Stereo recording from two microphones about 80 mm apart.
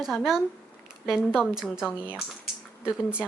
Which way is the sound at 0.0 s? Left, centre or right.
Centre.